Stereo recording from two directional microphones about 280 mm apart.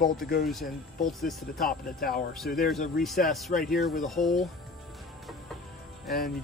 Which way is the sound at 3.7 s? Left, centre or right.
Centre.